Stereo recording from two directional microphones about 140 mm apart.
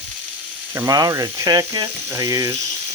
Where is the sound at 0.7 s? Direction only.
20° right (ahead or behind).